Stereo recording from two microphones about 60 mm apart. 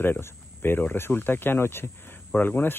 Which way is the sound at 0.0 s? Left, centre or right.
Left.